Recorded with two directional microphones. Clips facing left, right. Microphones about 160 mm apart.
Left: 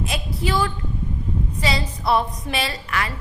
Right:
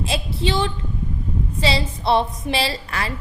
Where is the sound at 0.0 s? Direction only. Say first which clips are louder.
Right 2 dB; 30° right (ahead or behind).